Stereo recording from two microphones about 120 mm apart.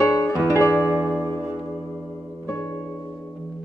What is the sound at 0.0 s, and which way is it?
Music, 25° left (ahead or behind).